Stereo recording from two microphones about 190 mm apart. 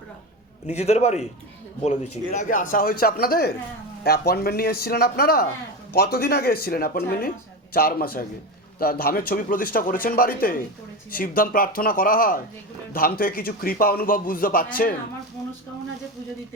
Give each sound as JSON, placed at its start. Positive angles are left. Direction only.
{"t": 0.7, "sound": "a man's voice", "side_deg": 35}